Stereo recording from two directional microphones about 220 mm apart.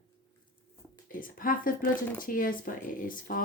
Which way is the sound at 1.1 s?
40° left (ahead or behind).